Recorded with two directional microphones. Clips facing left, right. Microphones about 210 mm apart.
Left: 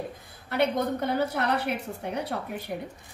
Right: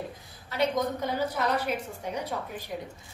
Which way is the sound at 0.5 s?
60° left (ahead or behind).